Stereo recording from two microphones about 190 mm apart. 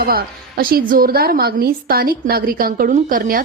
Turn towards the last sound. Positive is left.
turn(degrees=-45)  # may be behind; listen again after turning